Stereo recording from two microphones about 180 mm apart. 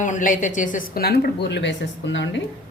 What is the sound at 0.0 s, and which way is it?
A woman's voice, 45° left (ahead or behind).